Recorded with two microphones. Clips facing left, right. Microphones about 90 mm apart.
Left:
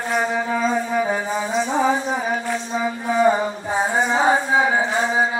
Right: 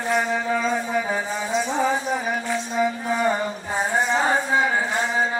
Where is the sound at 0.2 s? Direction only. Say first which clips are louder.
Left 1 dB; 10° left (ahead or behind).